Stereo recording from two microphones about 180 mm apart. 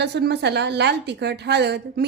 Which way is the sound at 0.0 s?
70° right (ahead or behind).